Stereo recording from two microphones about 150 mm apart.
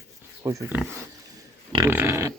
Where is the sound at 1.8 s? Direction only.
15° right (ahead or behind).